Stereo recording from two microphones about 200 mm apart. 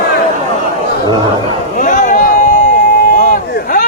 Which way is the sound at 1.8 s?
40° left (ahead or behind).